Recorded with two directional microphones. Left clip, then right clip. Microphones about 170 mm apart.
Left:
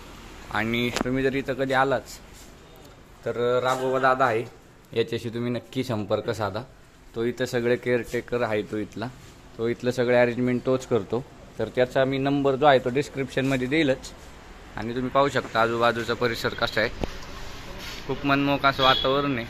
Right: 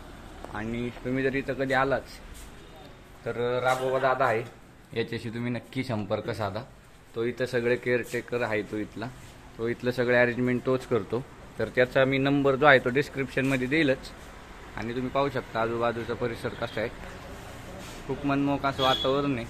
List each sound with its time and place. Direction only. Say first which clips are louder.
0.5 s speech: left 9 dB; 20° left (ahead or behind)
3.3 s speech: left 3 dB; 15° left (ahead or behind)
18.2 s a man's voice: left 6 dB; 5° left (ahead or behind)